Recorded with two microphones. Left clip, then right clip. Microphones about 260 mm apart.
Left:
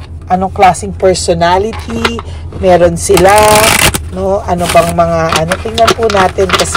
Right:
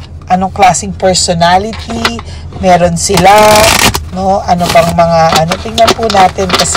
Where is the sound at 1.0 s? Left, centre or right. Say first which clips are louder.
Right 1 dB; centre.